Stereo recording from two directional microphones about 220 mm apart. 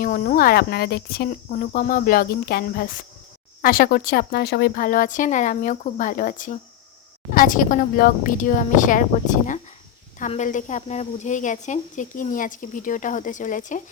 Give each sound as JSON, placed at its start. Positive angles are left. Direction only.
{"t": 0.0, "sound": "speech", "side_deg": 40}
{"t": 10.2, "sound": "speech", "side_deg": 35}